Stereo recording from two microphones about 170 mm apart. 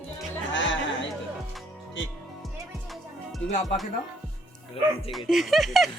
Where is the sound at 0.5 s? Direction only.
90° left.